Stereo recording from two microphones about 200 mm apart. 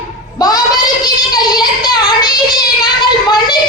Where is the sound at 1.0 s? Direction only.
20° left (ahead or behind).